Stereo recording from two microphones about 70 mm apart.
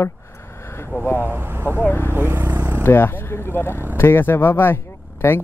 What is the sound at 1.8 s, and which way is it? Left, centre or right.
Speech, left.